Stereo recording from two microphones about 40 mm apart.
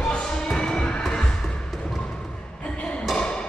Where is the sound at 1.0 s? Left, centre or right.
Centre.